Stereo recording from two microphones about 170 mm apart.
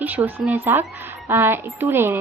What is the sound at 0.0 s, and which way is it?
Speech, 10° right (ahead or behind).